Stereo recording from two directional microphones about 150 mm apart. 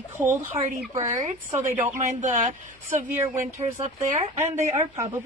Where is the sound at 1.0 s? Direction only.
50° right (ahead or behind).